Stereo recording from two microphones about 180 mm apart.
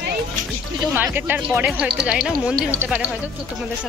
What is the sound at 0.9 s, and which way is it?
Speech, 10° right (ahead or behind).